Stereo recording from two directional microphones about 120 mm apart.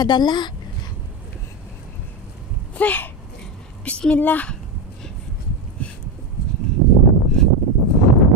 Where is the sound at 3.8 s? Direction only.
10° left (ahead or behind).